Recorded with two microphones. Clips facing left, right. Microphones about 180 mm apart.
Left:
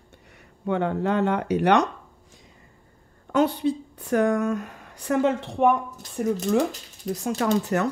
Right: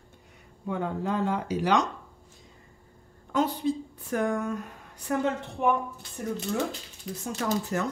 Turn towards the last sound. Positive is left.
turn(degrees=75)  # may be behind; listen again after turning